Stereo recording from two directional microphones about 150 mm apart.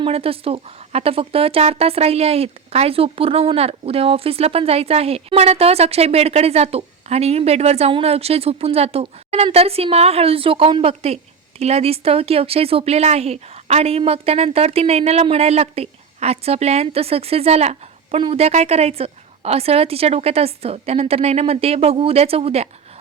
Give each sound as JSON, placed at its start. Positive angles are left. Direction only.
{"t": 0.0, "sound": "speech", "side_deg": -40}